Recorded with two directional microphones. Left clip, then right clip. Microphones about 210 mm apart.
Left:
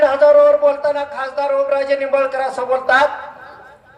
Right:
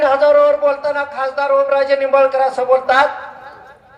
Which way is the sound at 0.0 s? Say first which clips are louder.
Left 1 dB; centre (ahead or behind).